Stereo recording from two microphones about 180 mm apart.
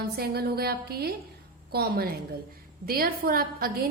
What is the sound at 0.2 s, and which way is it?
A woman's voice, 60° right (ahead or behind).